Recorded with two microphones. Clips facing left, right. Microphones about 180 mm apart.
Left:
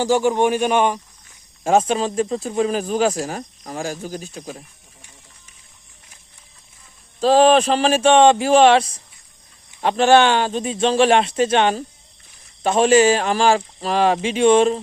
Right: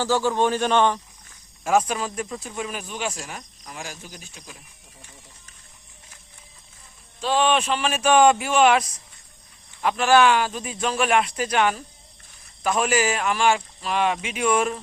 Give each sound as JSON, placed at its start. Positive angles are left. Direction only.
{"t": 0.0, "sound": "a man's voice", "side_deg": 15}
{"t": 1.6, "sound": "speech", "side_deg": 25}
{"t": 7.2, "sound": "a man's voice", "side_deg": 35}